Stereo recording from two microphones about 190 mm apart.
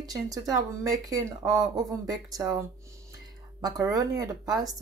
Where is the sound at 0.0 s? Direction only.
20° right (ahead or behind).